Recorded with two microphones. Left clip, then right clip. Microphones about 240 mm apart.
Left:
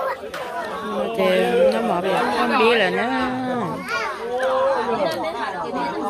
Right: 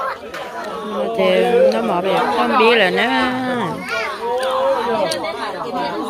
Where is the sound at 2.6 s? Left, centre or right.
Centre.